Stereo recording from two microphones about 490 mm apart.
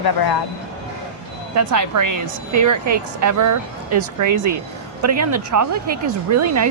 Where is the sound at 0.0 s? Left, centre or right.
Left.